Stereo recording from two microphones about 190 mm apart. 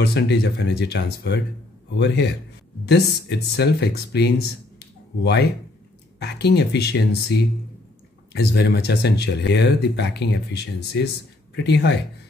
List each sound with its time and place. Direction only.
0.0 s a man's voice: 65° left (ahead or behind)
4.7 s a sound: 60° left (ahead or behind)
6.1 s speech: 60° left (ahead or behind)